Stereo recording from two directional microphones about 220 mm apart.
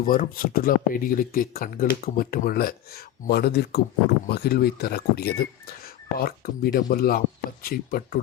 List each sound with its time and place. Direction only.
0.0 s speech: 40° left (ahead or behind)